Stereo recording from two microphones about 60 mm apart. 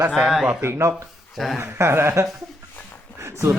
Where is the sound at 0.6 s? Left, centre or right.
Right.